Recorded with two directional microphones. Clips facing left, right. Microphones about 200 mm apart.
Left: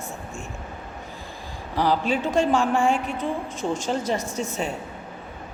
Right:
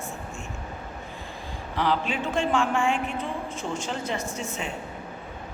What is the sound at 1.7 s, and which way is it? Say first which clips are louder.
A woman's voice: left 4 dB; 40° left (ahead or behind).